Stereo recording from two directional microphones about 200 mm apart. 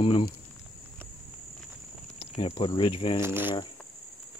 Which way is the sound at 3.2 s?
10° right (ahead or behind).